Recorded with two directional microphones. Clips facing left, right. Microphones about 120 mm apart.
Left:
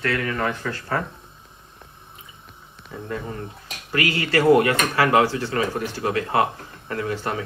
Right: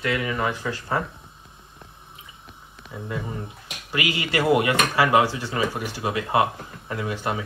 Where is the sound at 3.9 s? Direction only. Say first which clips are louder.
Left 3 dB; 15° right (ahead or behind).